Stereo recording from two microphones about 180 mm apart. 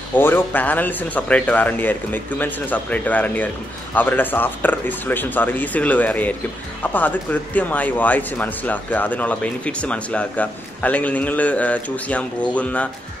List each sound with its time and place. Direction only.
0.2 s speech: 10° left (ahead or behind)